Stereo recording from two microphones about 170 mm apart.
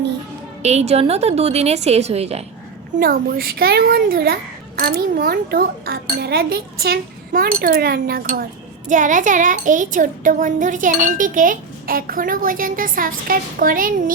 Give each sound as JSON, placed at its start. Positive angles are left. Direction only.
{"t": 0.6, "sound": "a woman's voice", "side_deg": -40}
{"t": 3.0, "sound": "a child's voice", "side_deg": -60}
{"t": 8.9, "sound": "a sound", "side_deg": -50}